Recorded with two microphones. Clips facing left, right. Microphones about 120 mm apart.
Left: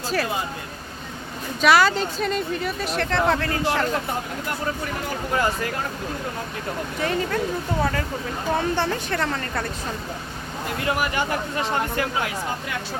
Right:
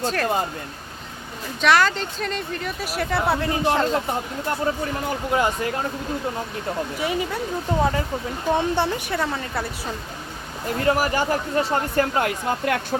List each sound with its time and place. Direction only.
0.0 s speech: 5° left (ahead or behind)
1.6 s a woman's voice: 5° left (ahead or behind); by 5.7 s 20° right (ahead or behind)
7.0 s a woman's voice: 10° right (ahead or behind)
10.8 s speech: 35° right (ahead or behind)
11.9 s speech: 55° right (ahead or behind)